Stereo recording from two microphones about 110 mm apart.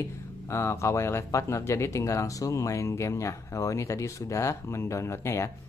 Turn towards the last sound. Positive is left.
turn(degrees=25)  # may be behind; listen again after turning